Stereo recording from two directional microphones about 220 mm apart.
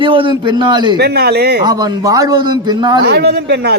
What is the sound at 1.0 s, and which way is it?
Speech, 45° right (ahead or behind).